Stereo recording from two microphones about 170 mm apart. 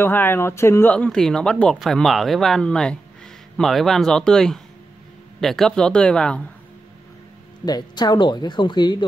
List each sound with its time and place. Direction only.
0.0 s speech: 10° left (ahead or behind)
7.6 s speech: 25° left (ahead or behind)